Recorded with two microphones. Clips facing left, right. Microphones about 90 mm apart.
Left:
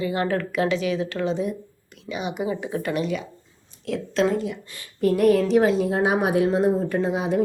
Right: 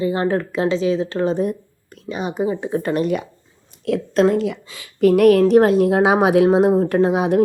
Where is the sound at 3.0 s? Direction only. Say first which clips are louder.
Right 6 dB; 55° right (ahead or behind).